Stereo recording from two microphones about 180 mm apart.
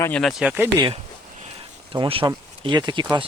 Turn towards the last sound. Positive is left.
turn(degrees=-25)  # may be behind; listen again after turning